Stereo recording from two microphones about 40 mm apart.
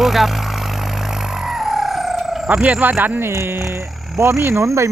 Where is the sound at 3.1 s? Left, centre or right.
Right.